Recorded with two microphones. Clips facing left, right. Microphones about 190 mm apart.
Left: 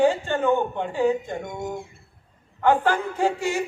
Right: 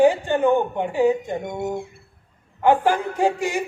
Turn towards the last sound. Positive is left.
turn(degrees=-15)  # may be behind; listen again after turning